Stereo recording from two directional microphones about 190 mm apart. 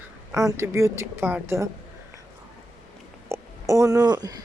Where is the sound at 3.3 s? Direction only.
15° right (ahead or behind).